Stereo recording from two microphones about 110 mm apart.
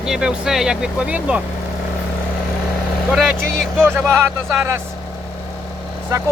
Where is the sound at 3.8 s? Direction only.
20° right (ahead or behind).